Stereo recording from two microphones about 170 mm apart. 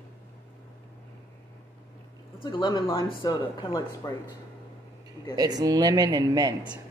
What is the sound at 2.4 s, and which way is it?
Speech, 25° left (ahead or behind).